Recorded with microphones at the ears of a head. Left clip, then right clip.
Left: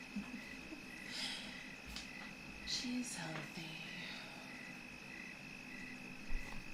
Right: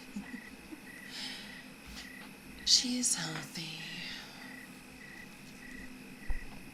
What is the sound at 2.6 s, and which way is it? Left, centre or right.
Speech, right.